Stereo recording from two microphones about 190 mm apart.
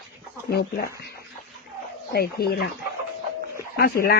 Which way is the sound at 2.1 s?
55° left (ahead or behind).